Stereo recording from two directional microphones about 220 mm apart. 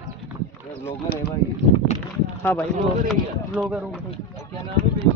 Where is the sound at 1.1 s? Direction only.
45° left (ahead or behind).